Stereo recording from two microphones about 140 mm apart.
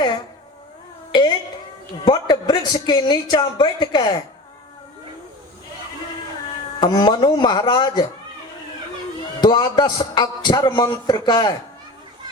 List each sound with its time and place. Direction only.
2.0 s a woman's voice: 30° left (ahead or behind)
6.7 s a woman's voice: 30° left (ahead or behind)
9.4 s a woman's voice: 30° left (ahead or behind)